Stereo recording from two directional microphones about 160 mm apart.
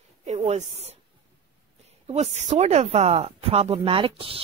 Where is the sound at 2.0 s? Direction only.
40° right (ahead or behind).